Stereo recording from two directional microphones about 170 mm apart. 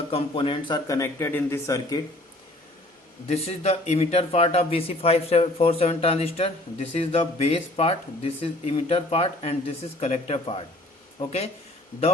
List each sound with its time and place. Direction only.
0.1 s speech: 30° left (ahead or behind)
3.2 s speech: 35° left (ahead or behind)